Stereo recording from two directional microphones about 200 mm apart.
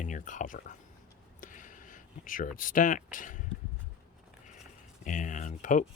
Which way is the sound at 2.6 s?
40° left (ahead or behind).